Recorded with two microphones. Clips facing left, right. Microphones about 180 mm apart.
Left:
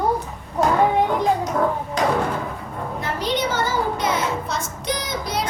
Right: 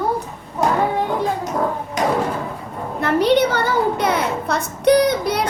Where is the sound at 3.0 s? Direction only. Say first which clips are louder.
Right 9 dB; 65° right (ahead or behind).